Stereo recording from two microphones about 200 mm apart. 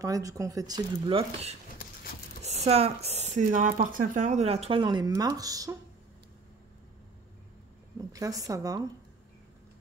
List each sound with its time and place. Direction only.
0.0 s speech: 15° right (ahead or behind)
8.0 s a woman's voice: 15° right (ahead or behind)